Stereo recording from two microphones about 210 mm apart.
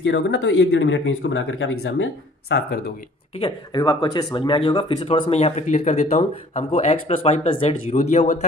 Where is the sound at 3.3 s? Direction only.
20° left (ahead or behind).